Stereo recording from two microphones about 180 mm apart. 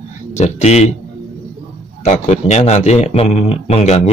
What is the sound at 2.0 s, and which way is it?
Speech, 40° left (ahead or behind).